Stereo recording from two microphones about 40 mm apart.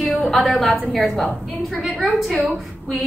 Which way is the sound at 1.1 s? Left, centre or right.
Centre.